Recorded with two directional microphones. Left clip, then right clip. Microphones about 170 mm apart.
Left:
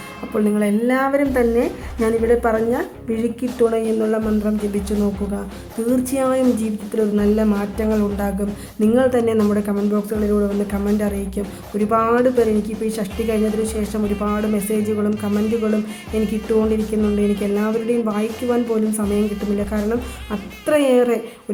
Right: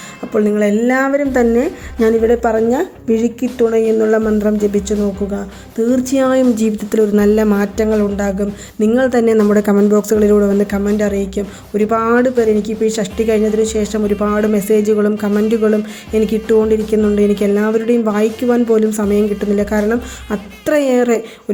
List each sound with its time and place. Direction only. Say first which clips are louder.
0.3 s a woman's voice: right 6 dB; 15° right (ahead or behind)
6.9 s a woman's voice: right 6 dB; 50° right (ahead or behind)
7.9 s a woman's voice: right 5 dB; 20° right (ahead or behind); by 10.5 s 50° right (ahead or behind)
10.7 s a woman's voice: right 6 dB; 25° right (ahead or behind)